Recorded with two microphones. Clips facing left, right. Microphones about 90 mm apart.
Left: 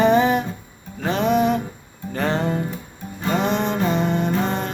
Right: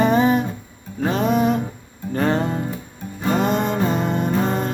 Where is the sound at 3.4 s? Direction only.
45° right (ahead or behind).